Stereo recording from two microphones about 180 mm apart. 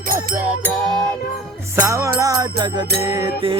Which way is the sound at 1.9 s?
20° right (ahead or behind).